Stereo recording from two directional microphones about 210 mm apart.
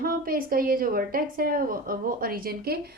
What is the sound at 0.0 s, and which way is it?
A woman's voice, 45° right (ahead or behind).